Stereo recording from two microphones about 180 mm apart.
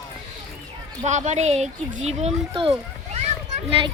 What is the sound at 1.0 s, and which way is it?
A child's voice, 40° right (ahead or behind).